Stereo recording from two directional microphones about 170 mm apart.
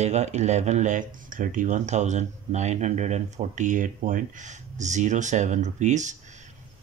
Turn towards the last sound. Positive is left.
turn(degrees=-45)  # may be behind; listen again after turning